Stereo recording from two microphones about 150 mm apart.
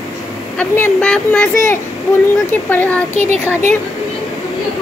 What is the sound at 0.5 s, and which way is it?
Speech, 10° left (ahead or behind).